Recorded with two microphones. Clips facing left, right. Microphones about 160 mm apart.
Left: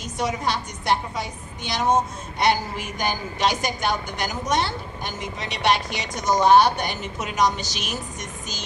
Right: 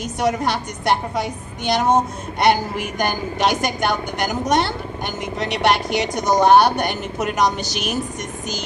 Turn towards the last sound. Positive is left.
turn(degrees=-60)  # may be behind; listen again after turning